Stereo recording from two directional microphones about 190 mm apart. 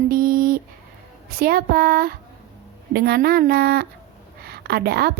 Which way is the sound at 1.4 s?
50° right (ahead or behind).